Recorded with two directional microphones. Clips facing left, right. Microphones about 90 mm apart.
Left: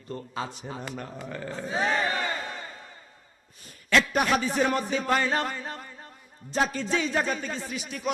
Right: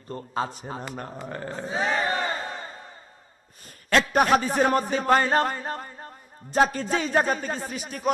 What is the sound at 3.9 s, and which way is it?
Speech, 45° right (ahead or behind).